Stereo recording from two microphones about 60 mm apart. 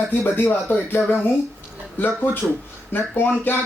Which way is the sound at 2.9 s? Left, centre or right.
Left.